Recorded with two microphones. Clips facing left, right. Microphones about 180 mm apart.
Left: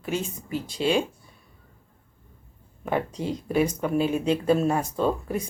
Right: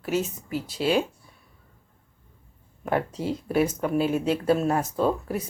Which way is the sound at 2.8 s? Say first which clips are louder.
Right 1 dB; 5° right (ahead or behind).